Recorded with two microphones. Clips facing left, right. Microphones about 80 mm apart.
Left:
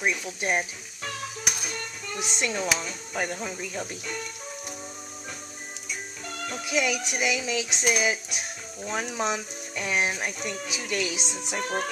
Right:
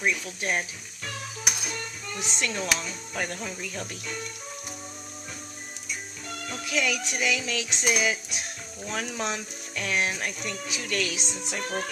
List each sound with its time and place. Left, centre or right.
0.0 s speech: centre
1.4 s music: centre
2.3 s speech: centre
6.6 s speech: centre
7.0 s music: centre